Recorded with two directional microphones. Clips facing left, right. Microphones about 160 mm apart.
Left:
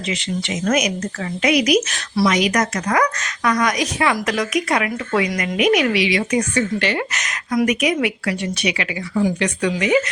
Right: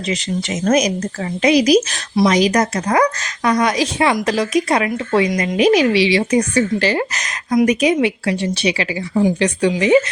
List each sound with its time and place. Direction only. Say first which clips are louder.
0.1 s speech: right 3 dB; 40° right (ahead or behind)